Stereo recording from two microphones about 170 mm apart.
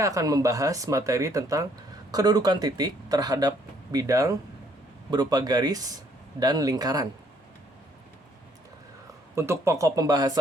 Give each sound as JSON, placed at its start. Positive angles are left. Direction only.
{"t": 0.0, "sound": "speech", "side_deg": -20}
{"t": 9.3, "sound": "speech", "side_deg": -15}